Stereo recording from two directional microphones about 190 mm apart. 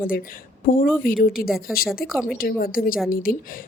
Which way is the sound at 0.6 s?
50° left (ahead or behind).